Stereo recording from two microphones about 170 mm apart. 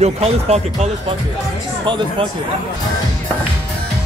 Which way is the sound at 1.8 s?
30° right (ahead or behind).